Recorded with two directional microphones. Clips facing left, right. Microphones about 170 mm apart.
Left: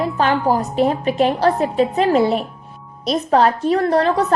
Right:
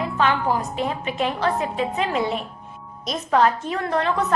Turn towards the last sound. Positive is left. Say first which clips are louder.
# left 6 dB
turn(degrees=35)  # may be behind; listen again after turning